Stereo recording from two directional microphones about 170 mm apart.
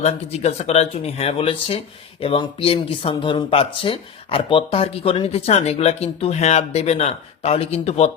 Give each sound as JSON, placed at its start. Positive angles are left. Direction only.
{"t": 0.0, "sound": "speech", "side_deg": 40}